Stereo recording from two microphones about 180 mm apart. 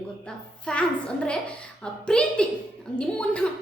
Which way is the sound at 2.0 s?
5° left (ahead or behind).